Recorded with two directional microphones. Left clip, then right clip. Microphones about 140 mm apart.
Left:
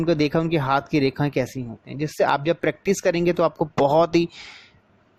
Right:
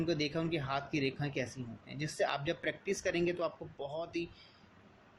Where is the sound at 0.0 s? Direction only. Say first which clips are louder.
Left 14 dB; 75° left (ahead or behind).